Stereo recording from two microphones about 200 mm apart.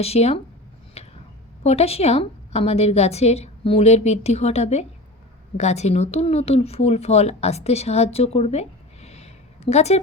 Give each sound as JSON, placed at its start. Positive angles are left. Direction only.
{"t": 0.0, "sound": "a woman's voice", "side_deg": 30}
{"t": 1.0, "sound": "a sound", "side_deg": 30}
{"t": 1.6, "sound": "a woman's voice", "side_deg": 30}